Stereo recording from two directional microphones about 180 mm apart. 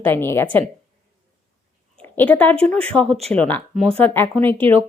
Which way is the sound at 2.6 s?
5° left (ahead or behind).